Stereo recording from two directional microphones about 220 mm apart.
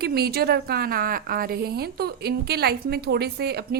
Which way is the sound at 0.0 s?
45° right (ahead or behind).